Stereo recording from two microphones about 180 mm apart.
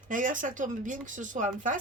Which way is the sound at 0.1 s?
45° right (ahead or behind).